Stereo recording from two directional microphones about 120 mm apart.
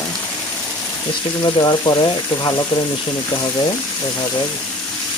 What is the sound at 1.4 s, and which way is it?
Speech, 35° left (ahead or behind).